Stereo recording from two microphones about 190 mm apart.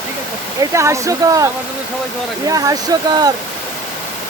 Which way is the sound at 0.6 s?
15° right (ahead or behind).